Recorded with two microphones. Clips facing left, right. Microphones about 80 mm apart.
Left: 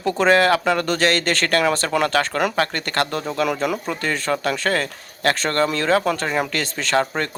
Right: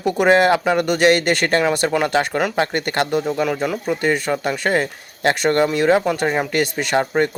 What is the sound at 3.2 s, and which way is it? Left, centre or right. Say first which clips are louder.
Speech: right 2 dB; centre.